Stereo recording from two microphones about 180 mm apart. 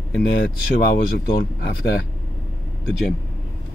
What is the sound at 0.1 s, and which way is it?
Speech, 65° left (ahead or behind).